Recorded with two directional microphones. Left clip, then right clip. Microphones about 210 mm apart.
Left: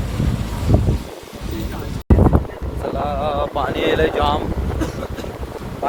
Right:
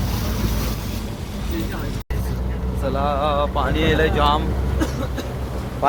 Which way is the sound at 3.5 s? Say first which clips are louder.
Left 2 dB; 5° left (ahead or behind).